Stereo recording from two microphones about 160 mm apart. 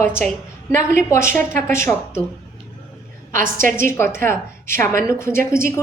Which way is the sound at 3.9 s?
15° left (ahead or behind).